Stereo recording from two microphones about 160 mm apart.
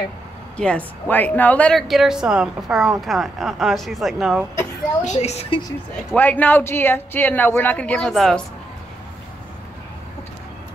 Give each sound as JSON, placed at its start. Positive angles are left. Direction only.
{"t": 0.6, "sound": "a woman's voice", "side_deg": 10}
{"t": 5.0, "sound": "a woman's voice", "side_deg": 45}
{"t": 5.7, "sound": "speech", "side_deg": 10}